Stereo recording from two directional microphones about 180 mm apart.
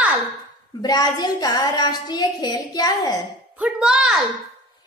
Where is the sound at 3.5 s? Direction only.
5° right (ahead or behind).